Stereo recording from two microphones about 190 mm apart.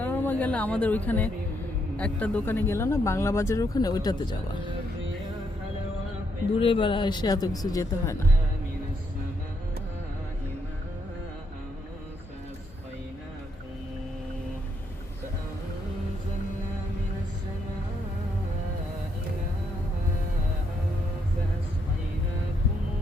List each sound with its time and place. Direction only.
0.0 s speech: 10° left (ahead or behind)
6.6 s speech: 30° left (ahead or behind)